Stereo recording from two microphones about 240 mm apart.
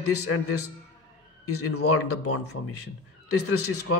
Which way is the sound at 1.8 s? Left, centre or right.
Left.